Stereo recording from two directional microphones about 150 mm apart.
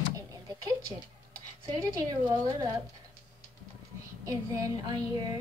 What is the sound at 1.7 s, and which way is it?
A woman's voice, 25° right (ahead or behind).